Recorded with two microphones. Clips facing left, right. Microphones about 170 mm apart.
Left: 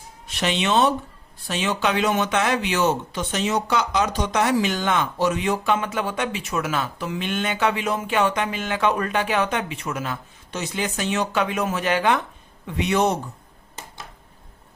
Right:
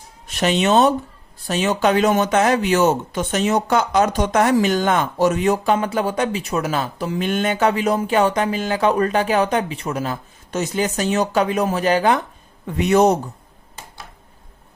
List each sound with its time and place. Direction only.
0.3 s speech: 45° right (ahead or behind)